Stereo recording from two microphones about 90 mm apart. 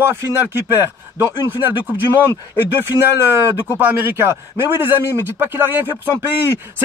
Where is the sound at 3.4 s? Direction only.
20° right (ahead or behind).